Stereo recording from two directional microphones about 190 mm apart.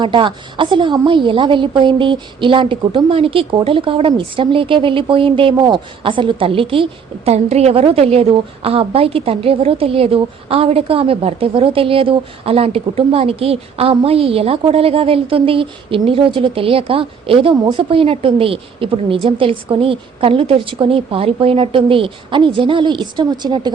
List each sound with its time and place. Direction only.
0.0 s a woman's voice: 25° right (ahead or behind)